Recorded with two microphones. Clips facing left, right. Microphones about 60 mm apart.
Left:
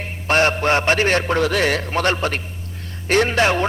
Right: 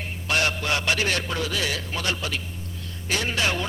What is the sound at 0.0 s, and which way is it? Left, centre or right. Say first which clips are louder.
A man's voice: left 7 dB; left.